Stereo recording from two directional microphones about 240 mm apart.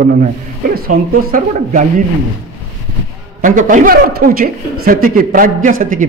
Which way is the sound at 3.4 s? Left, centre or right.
Right.